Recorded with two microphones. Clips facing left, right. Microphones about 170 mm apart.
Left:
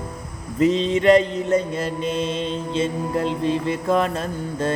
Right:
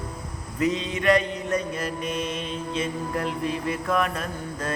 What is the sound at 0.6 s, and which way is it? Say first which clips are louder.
Music: left 7 dB; 25° left (ahead or behind).